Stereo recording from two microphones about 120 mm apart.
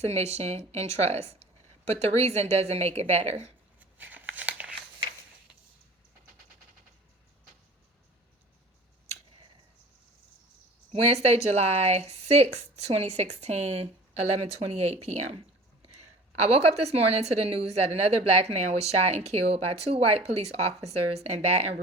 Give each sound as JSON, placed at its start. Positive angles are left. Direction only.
{"t": 0.0, "sound": "speech", "side_deg": -60}
{"t": 3.8, "sound": "a sound", "side_deg": -15}
{"t": 11.0, "sound": "speech", "side_deg": -65}